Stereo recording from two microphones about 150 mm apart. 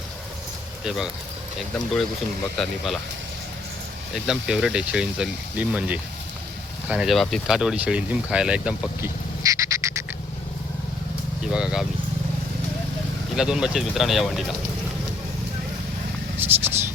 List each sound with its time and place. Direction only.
0.9 s speech: 5° right (ahead or behind)
2.6 s speech: centre (ahead or behind)
4.1 s speech: 5° right (ahead or behind)
9.4 s frog: 20° right (ahead or behind)
11.5 s speech: 5° right (ahead or behind)
13.3 s speech: 5° right (ahead or behind)
16.4 s vehicle: 15° right (ahead or behind)